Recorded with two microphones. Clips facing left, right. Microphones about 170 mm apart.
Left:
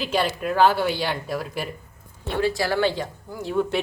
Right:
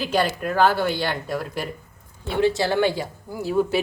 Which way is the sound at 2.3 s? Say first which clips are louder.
Right 3 dB; 20° right (ahead or behind).